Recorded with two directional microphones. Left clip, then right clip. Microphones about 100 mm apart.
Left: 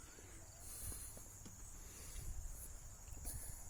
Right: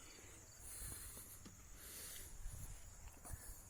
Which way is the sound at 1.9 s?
15° left (ahead or behind).